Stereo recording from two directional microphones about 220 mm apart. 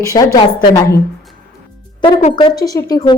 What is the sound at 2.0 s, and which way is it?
Speech, 20° left (ahead or behind).